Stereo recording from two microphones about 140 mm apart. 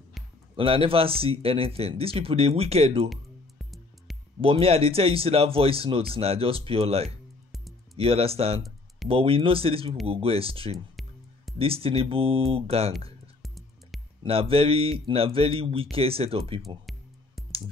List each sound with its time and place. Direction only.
0.6 s speech: 40° right (ahead or behind)
3.1 s music: centre (ahead or behind)
4.4 s speech: 40° right (ahead or behind)
7.5 s music: centre (ahead or behind)
8.0 s speech: 45° right (ahead or behind)
13.4 s music: centre (ahead or behind)
14.2 s speech: 45° right (ahead or behind)
17.4 s clicking: centre (ahead or behind)